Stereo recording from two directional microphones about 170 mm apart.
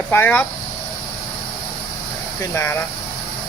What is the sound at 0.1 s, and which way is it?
Speech, 10° left (ahead or behind).